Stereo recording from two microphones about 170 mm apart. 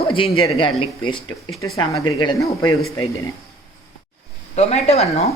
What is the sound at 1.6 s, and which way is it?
Speech, 20° left (ahead or behind).